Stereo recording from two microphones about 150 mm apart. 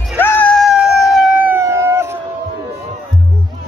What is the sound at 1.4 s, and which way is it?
Howl, 15° right (ahead or behind).